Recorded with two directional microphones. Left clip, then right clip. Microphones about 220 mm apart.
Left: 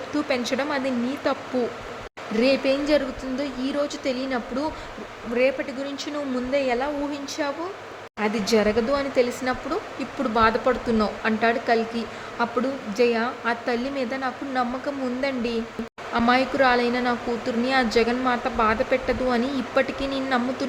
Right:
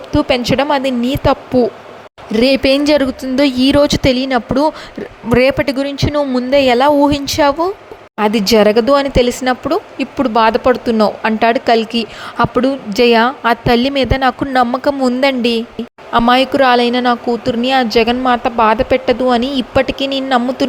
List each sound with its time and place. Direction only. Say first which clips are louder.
0.1 s speech: right 12 dB; 30° right (ahead or behind)
5.3 s speech: right 11 dB; 45° right (ahead or behind)